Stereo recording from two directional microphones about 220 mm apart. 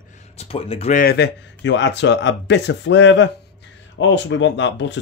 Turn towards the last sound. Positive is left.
turn(degrees=55)  # may be behind; listen again after turning